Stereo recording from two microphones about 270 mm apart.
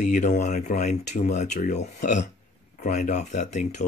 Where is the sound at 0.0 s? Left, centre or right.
Left.